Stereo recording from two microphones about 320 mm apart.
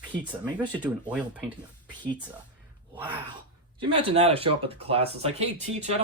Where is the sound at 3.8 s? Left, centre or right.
Centre.